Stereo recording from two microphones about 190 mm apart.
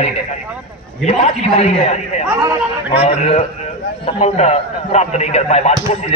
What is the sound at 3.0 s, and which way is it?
A man's voice, 35° left (ahead or behind).